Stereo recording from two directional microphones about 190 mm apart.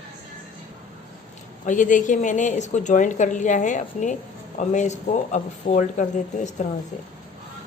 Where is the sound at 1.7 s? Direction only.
45° left (ahead or behind).